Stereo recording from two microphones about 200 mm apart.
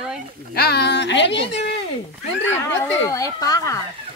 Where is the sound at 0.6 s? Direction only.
55° left (ahead or behind).